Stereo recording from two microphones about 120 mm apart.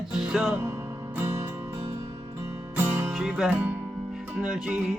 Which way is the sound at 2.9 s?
20° right (ahead or behind).